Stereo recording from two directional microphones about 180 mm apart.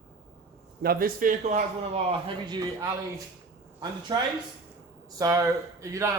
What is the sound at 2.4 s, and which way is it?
Speech, 20° right (ahead or behind).